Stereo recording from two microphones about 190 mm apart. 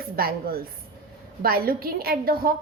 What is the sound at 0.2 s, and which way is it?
A woman's voice, 50° right (ahead or behind).